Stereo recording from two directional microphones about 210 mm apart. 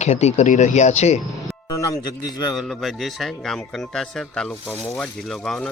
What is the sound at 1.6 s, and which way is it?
Speech, 15° left (ahead or behind).